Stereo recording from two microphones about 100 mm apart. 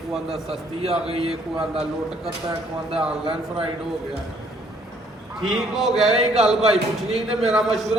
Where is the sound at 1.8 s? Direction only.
5° right (ahead or behind).